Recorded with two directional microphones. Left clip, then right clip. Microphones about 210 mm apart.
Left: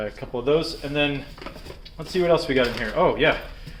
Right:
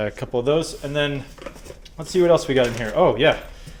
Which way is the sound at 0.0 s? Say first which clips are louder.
Right 4 dB; 50° right (ahead or behind).